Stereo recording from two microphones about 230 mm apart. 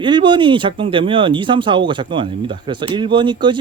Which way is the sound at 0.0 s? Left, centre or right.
Right.